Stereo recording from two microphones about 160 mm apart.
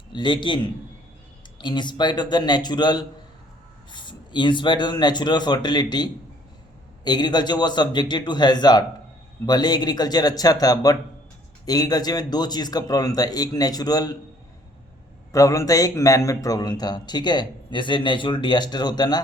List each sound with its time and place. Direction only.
0.1 s a man's voice: 30° left (ahead or behind)
15.3 s a man's voice: 20° left (ahead or behind)